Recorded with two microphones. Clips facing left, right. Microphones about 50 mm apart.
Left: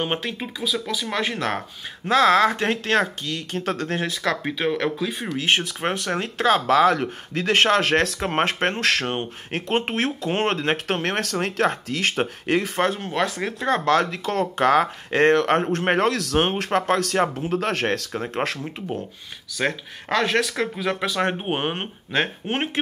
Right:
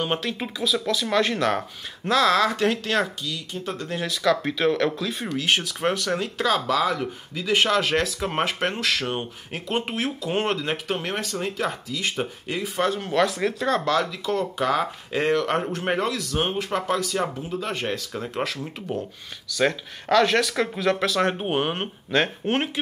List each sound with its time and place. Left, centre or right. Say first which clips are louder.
0.0 s speech: even; left
0.4 s speech: right 1 dB; centre
2.0 s speech: left 3 dB; left
3.5 s speech: left 7 dB; left
4.0 s speech: right 2 dB; left
4.4 s speech: right 2 dB; centre
5.4 s speech: left 1 dB; left
12.7 s speech: left 1 dB; left
13.0 s speech: right 2 dB; left
13.8 s speech: left 3 dB; left
18.1 s speech: left 2 dB; left
19.5 s speech: right 2 dB; centre